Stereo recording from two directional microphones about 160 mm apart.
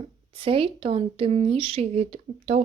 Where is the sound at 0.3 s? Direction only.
35° right (ahead or behind).